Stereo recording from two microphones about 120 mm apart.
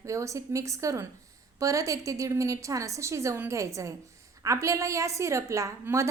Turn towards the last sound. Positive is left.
turn(degrees=-25)  # may be behind; listen again after turning